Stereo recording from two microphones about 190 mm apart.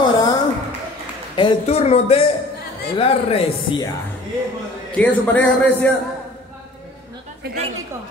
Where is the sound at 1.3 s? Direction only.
30° left (ahead or behind).